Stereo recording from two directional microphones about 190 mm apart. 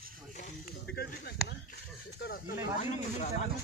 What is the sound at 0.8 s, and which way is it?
Speech, 55° left (ahead or behind).